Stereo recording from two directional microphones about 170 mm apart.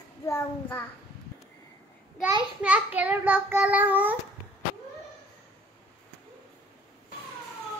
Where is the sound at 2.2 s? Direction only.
10° right (ahead or behind).